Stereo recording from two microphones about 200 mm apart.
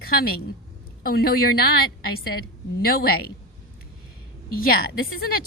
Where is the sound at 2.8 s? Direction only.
50° left (ahead or behind).